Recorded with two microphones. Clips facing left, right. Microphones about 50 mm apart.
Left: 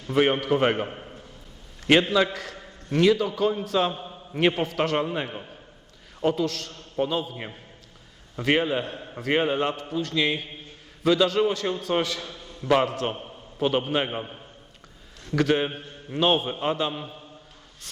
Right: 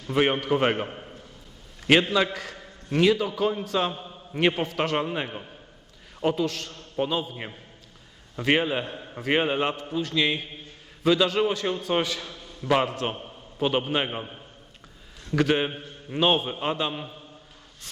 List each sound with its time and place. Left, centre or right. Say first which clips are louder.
0.1 s a man's voice: left 1 dB; centre
6.7 s a sound: left 2 dB; centre
7.1 s a man's voice: even; centre